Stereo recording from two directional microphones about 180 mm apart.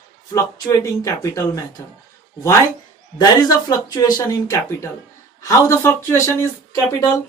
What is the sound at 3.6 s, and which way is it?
Speech, 20° left (ahead or behind).